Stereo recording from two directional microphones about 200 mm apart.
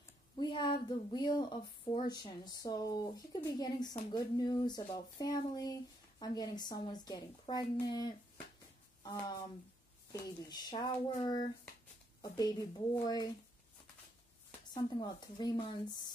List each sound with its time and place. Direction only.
0.4 s speech: 25° left (ahead or behind)
10.1 s speech: 20° left (ahead or behind)
14.7 s speech: 20° left (ahead or behind)